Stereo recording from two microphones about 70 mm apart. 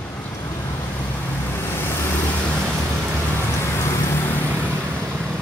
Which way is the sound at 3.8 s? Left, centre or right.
Left.